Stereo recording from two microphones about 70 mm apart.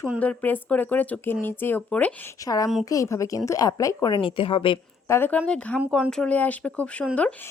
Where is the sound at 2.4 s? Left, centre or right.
Left.